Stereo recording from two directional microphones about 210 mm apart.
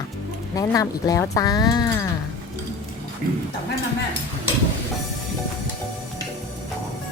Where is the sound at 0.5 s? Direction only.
15° left (ahead or behind).